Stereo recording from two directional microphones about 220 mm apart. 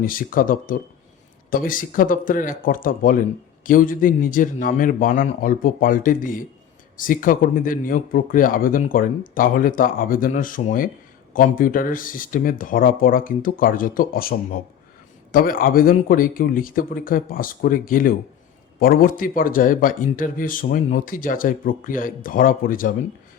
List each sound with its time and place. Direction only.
0.0 s speech: 40° left (ahead or behind)